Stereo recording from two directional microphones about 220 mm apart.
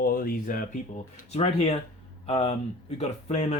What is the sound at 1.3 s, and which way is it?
Speech, 30° left (ahead or behind).